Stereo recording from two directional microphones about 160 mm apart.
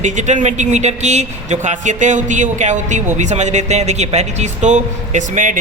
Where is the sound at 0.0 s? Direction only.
50° right (ahead or behind).